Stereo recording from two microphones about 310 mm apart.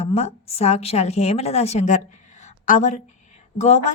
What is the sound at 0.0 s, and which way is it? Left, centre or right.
A woman's voice, centre.